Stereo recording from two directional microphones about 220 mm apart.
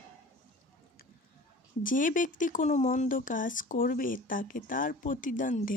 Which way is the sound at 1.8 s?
35° left (ahead or behind).